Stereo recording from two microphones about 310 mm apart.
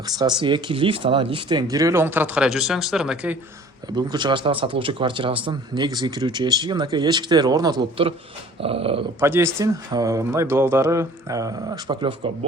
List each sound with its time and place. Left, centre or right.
0.2 s speech: centre
3.9 s speech: centre